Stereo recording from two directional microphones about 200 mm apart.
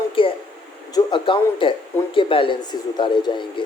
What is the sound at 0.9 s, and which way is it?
Speech, 25° left (ahead or behind).